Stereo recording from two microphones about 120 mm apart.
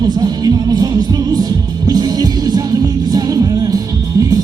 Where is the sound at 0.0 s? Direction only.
35° right (ahead or behind).